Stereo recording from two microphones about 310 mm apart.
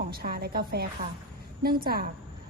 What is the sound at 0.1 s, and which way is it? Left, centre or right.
Speech, right.